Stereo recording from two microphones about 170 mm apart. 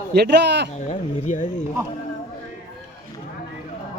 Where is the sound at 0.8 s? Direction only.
45° left (ahead or behind).